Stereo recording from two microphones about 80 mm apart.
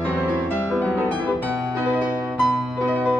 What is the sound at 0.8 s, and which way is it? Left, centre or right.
Music, centre.